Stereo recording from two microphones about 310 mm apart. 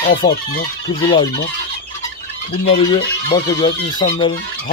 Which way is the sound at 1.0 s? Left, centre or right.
Centre.